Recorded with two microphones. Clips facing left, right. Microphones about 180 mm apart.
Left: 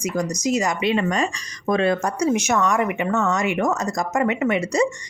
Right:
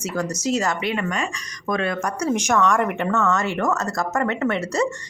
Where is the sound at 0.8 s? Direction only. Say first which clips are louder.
Left 4 dB; 25° left (ahead or behind).